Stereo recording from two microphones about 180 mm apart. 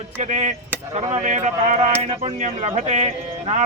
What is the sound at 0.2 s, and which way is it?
Speech, 40° right (ahead or behind).